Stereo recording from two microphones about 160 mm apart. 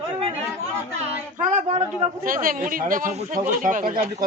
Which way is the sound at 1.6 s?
40° right (ahead or behind).